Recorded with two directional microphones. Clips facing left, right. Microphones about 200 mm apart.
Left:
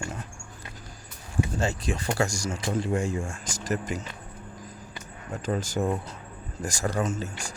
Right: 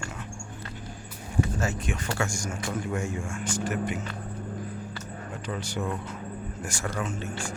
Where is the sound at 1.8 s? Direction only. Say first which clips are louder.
Left 3 dB; 35° left (ahead or behind).